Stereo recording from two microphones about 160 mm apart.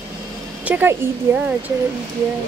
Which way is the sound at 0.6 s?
10° right (ahead or behind).